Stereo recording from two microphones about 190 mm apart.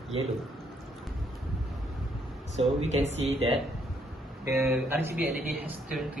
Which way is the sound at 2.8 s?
35° right (ahead or behind).